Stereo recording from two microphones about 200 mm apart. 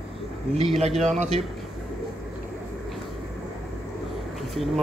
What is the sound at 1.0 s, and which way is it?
Speech, 35° right (ahead or behind).